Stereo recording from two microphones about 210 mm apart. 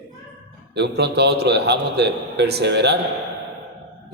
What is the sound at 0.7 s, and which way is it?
A man's voice, 55° right (ahead or behind).